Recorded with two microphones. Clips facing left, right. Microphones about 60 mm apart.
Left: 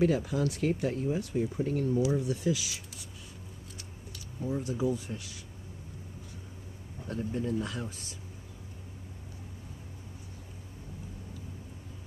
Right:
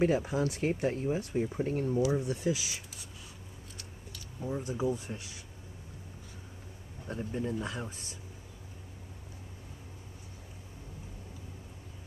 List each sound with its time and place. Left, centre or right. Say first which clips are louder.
0.0 s speech: left 1 dB; right
4.4 s speech: left 2 dB; centre
4.9 s speech: left 2 dB; right
7.1 s speech: left 2 dB; right